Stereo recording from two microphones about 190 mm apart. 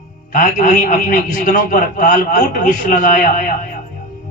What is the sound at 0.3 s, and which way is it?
A man's voice, 40° left (ahead or behind).